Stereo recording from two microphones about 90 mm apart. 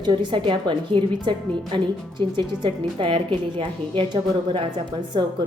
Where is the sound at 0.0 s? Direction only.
60° right (ahead or behind).